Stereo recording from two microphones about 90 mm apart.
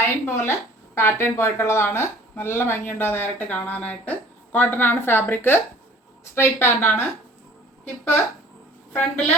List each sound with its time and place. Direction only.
0.0 s a woman's voice: 30° left (ahead or behind)
8.9 s a woman's voice: 15° left (ahead or behind)